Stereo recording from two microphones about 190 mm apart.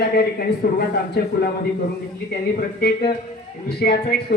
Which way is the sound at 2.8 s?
55° left (ahead or behind).